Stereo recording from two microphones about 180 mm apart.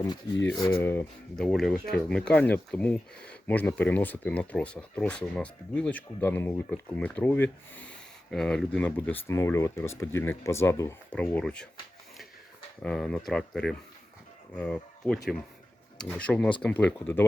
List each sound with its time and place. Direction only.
0.5 s speech: 20° left (ahead or behind)
0.8 s speech: 10° left (ahead or behind)
12.8 s speech: 5° left (ahead or behind)